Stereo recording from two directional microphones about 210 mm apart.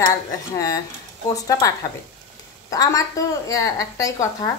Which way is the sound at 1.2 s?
15° left (ahead or behind).